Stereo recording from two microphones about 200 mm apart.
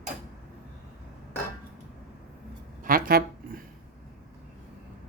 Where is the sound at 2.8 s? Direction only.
45° right (ahead or behind).